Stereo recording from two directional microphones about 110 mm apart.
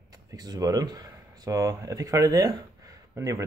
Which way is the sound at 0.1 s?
35° right (ahead or behind).